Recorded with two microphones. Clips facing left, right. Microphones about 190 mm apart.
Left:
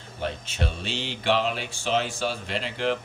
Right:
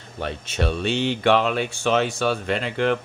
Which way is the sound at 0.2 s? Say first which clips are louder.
Right 4 dB; 65° right (ahead or behind).